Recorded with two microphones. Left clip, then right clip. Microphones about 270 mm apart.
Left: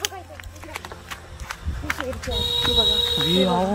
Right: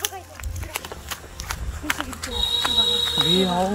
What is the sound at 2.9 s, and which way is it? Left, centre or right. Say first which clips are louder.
Speech: even; left.